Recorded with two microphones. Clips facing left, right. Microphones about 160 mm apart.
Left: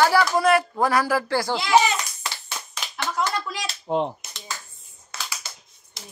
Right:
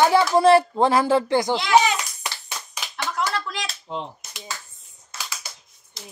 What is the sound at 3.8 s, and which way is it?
Speech, 55° left (ahead or behind).